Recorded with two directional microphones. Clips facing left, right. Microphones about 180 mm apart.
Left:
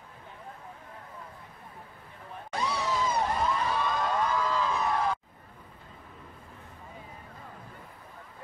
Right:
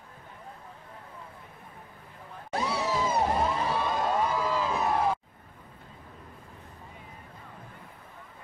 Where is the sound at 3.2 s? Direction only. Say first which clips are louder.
Right 2 dB; 25° right (ahead or behind).